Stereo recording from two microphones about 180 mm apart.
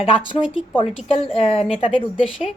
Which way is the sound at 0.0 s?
30° left (ahead or behind).